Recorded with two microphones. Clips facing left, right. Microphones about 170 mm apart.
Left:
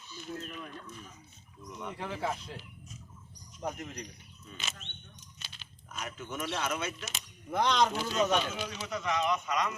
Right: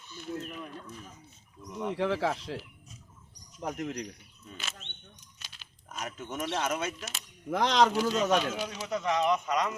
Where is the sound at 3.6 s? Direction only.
80° right.